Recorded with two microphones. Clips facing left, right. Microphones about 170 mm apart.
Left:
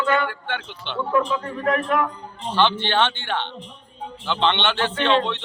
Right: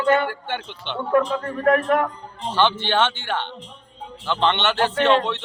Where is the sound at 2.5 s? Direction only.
10° right (ahead or behind).